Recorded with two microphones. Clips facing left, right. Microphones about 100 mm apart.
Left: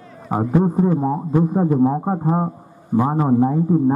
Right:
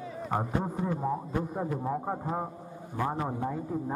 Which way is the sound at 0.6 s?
35° left (ahead or behind).